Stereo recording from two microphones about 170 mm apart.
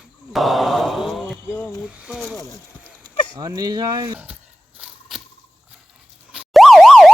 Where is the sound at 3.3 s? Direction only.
20° right (ahead or behind).